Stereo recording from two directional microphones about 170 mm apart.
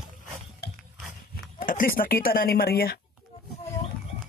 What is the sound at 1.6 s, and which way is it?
Speech, 50° left (ahead or behind).